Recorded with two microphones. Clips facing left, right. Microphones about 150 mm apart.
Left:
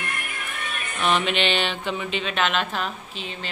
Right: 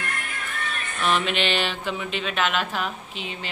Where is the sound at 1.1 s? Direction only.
Centre (ahead or behind).